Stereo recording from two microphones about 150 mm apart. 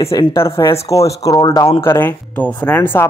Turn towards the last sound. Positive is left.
turn(degrees=10)  # may be behind; listen again after turning